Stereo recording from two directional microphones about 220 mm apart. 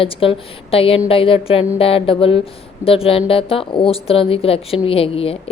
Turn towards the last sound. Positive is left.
turn(degrees=25)  # may be behind; listen again after turning